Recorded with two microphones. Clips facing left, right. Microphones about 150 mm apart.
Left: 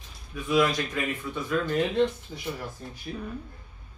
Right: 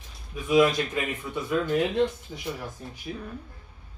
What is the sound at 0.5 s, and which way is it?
Speech, 15° right (ahead or behind).